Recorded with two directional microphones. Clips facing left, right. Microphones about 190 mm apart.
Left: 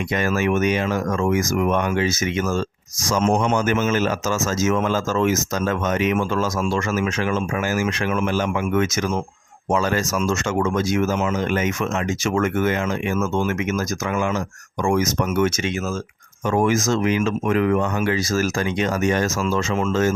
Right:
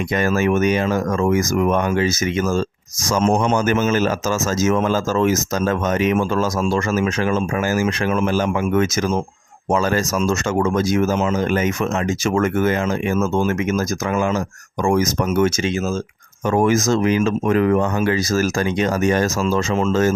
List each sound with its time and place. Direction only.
0.1 s speech: 40° right (ahead or behind)